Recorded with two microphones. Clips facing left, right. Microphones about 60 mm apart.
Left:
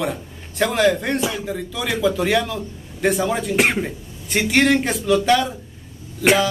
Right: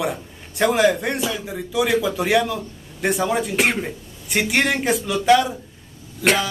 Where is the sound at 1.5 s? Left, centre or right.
Centre.